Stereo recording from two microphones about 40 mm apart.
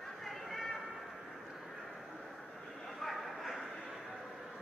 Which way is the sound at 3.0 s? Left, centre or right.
Centre.